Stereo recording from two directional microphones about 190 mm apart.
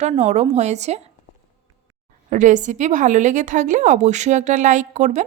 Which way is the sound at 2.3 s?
40° right (ahead or behind).